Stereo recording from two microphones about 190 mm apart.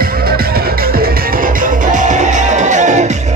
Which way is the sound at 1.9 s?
40° right (ahead or behind).